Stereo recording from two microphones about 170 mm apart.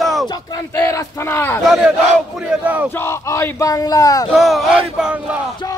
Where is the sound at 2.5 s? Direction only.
10° right (ahead or behind).